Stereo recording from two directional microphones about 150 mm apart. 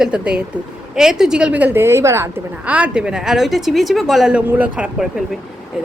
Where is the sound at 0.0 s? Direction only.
5° right (ahead or behind).